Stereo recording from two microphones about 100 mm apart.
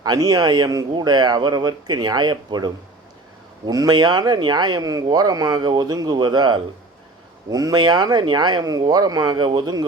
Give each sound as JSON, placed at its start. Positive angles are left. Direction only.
{"t": 0.0, "sound": "speech", "side_deg": -40}